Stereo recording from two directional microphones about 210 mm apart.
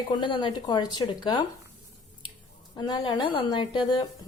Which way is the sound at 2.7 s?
20° left (ahead or behind).